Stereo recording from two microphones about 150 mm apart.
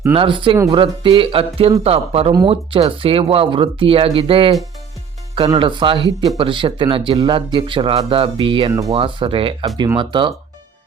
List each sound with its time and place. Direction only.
0.1 s speech: 35° right (ahead or behind)
0.5 s speech: 20° right (ahead or behind)
0.8 s speech: 35° right (ahead or behind)